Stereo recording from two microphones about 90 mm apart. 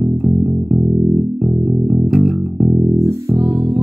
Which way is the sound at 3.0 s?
40° right (ahead or behind).